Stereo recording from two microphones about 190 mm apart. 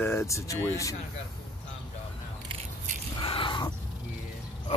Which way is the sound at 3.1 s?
25° left (ahead or behind).